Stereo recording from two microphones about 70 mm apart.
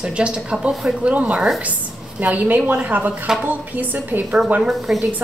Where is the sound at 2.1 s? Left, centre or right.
Right.